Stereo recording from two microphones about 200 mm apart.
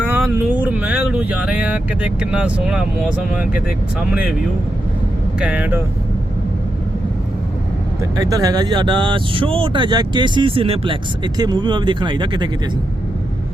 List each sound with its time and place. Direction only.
0.1 s speech: 10° right (ahead or behind)
5.4 s speech: 5° right (ahead or behind)
8.1 s speech: 15° right (ahead or behind)